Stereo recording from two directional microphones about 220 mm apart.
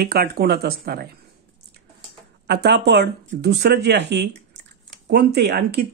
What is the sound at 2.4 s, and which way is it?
Speech, 50° right (ahead or behind).